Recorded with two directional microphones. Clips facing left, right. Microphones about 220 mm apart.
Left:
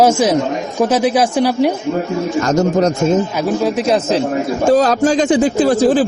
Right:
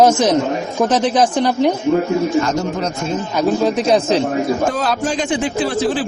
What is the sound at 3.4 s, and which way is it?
Speech, 5° left (ahead or behind).